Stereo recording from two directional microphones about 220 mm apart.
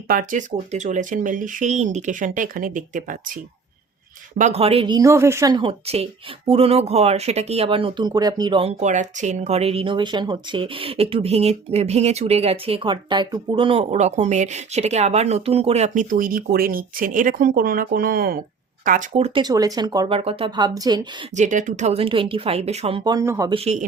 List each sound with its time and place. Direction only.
0.1 s speech: 35° right (ahead or behind)
4.4 s speech: 30° right (ahead or behind)
18.9 s speech: 30° right (ahead or behind)
21.3 s speech: 35° right (ahead or behind); by 23.6 s 15° right (ahead or behind)
23.6 s speech: 30° right (ahead or behind)